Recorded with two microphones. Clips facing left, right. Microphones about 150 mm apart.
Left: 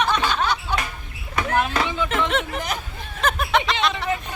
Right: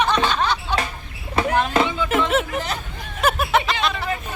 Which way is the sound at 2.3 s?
5° right (ahead or behind).